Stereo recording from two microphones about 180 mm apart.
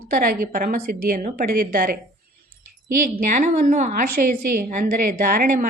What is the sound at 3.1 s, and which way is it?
A woman's voice, 45° right (ahead or behind).